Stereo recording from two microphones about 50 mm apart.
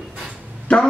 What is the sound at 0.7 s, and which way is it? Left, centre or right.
Music, centre.